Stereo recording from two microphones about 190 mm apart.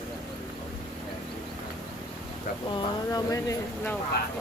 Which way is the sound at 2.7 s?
20° left (ahead or behind).